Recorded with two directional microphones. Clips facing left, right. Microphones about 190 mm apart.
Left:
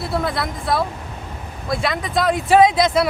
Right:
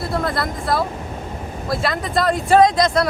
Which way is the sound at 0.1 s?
Centre (ahead or behind).